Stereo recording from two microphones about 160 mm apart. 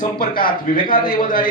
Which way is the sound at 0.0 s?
65° left (ahead or behind).